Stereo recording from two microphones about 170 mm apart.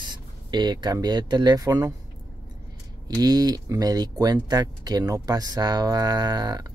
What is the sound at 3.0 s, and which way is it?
Speech, 25° right (ahead or behind).